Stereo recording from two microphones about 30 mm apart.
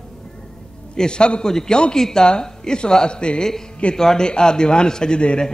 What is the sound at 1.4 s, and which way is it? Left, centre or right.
Speech, centre.